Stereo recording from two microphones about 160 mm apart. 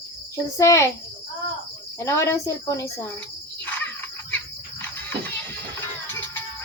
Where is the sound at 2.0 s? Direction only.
20° left (ahead or behind).